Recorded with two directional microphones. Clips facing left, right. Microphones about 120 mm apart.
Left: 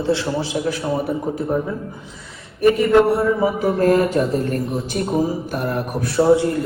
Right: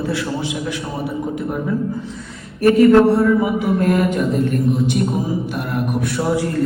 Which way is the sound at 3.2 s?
30° left (ahead or behind).